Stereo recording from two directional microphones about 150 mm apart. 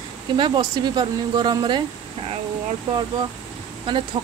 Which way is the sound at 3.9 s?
35° right (ahead or behind).